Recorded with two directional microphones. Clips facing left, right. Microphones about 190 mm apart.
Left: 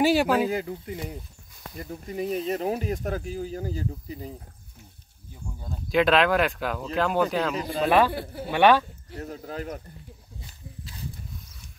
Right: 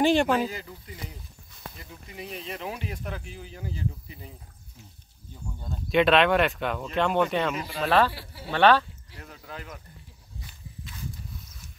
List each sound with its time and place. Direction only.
0.0 s speech: 5° left (ahead or behind)
0.5 s speech: 55° left (ahead or behind)
1.8 s speech: 45° left (ahead or behind)
5.6 s speech: centre (ahead or behind)
7.8 s speech: 15° left (ahead or behind)
8.1 s a man's voice: 50° left (ahead or behind)
8.5 s speech: 10° left (ahead or behind)
9.1 s speech: 45° left (ahead or behind)